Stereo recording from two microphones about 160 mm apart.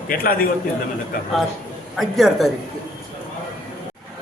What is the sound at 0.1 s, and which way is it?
Speech, 65° left (ahead or behind).